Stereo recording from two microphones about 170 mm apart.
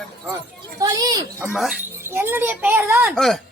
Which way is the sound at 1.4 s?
5° right (ahead or behind).